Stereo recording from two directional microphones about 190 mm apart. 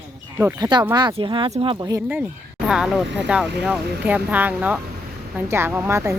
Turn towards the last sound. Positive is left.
turn(degrees=-15)  # may be behind; listen again after turning